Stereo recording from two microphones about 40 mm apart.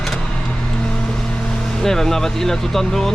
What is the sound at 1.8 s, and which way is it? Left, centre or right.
Speech, centre.